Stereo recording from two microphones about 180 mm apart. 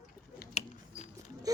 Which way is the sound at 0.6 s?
35° left (ahead or behind).